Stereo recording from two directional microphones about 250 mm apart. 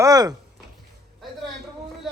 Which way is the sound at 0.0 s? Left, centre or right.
Centre.